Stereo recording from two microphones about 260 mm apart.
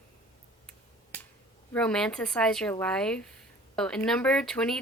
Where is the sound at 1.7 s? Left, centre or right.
Centre.